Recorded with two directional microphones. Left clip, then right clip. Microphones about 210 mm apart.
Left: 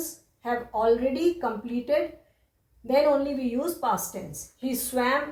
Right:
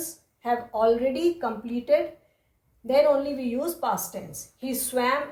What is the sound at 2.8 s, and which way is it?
Speech, 45° right (ahead or behind).